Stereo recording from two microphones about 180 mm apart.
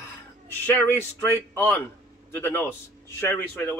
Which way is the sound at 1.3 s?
10° left (ahead or behind).